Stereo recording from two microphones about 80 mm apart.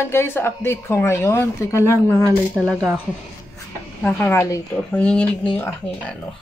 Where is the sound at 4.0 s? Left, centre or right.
Left.